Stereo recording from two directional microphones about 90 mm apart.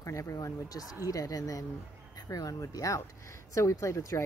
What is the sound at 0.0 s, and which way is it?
Speech, 35° left (ahead or behind).